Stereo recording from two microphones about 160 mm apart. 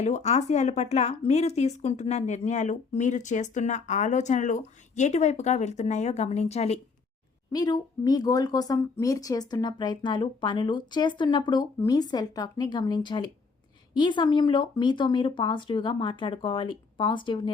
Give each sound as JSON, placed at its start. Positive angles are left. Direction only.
{"t": 0.0, "sound": "a woman's voice", "side_deg": 45}
{"t": 7.5, "sound": "speech", "side_deg": 25}